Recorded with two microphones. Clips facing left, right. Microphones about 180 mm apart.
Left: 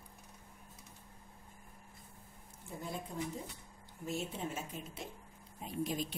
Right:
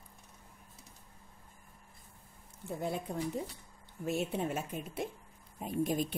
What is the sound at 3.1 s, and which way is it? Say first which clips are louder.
A woman's voice: right 5 dB; 65° right (ahead or behind).